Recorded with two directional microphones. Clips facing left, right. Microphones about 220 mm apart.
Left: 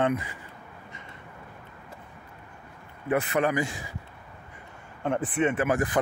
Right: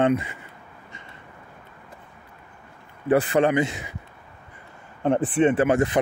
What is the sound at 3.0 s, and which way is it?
Speech, 30° right (ahead or behind).